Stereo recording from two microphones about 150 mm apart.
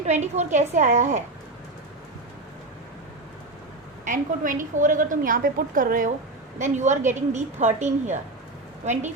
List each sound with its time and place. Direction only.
0.0 s a woman's voice: 50° right (ahead or behind)
4.0 s a woman's voice: 60° right (ahead or behind)
6.6 s a woman's voice: 50° right (ahead or behind)